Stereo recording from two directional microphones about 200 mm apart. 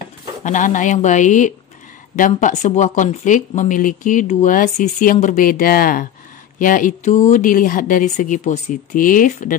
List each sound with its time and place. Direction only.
0.4 s speech: 40° left (ahead or behind)